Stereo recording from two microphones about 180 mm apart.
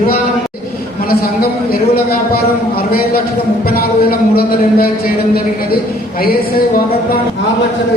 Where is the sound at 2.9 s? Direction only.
55° left (ahead or behind).